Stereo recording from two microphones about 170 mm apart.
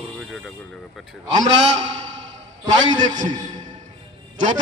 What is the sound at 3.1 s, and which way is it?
Speech, 50° right (ahead or behind).